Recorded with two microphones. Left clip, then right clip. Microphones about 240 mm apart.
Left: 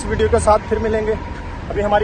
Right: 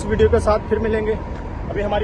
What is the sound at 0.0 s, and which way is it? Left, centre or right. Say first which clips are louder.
Speech: even; centre.